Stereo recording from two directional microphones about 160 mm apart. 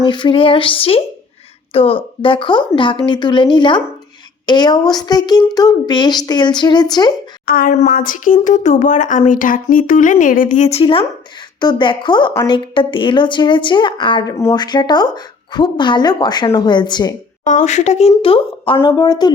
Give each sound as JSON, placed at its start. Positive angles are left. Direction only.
{"t": 0.0, "sound": "a woman's voice", "side_deg": 30}
{"t": 7.4, "sound": "a woman's voice", "side_deg": 65}
{"t": 17.4, "sound": "speech", "side_deg": 50}
{"t": 18.2, "sound": "a woman's voice", "side_deg": 35}